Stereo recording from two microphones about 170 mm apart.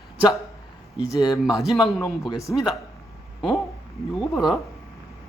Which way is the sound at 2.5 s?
Centre (ahead or behind).